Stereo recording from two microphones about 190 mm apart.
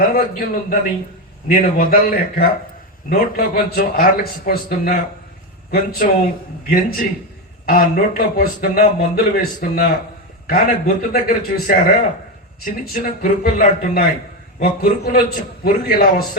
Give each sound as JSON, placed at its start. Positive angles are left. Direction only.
{"t": 0.1, "sound": "a man's voice", "side_deg": 50}